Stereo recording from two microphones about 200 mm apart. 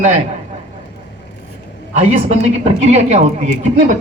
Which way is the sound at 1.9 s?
35° right (ahead or behind).